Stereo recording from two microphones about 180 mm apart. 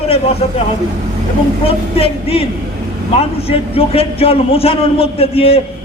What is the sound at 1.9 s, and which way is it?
A man's voice, 35° left (ahead or behind).